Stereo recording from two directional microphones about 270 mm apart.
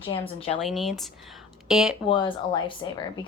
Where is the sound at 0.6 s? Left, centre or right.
Centre.